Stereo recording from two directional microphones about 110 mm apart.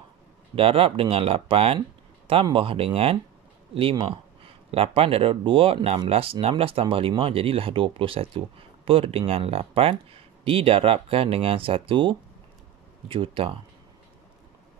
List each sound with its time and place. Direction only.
0.6 s speech: 60° right (ahead or behind)
4.6 s speech: 60° right (ahead or behind)